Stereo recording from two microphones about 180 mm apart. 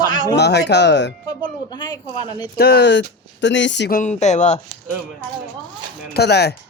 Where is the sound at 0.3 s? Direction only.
70° left (ahead or behind).